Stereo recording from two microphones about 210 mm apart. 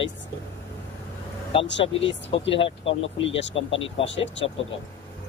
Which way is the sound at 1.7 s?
60° left (ahead or behind).